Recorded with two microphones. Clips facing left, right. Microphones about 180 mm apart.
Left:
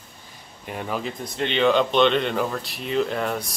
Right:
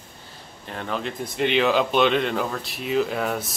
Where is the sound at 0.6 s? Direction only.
10° left (ahead or behind).